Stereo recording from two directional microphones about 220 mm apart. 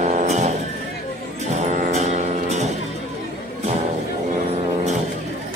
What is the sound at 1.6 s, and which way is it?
Music, 30° right (ahead or behind).